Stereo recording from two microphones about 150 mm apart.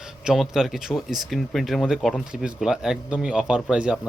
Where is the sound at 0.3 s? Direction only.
Centre (ahead or behind).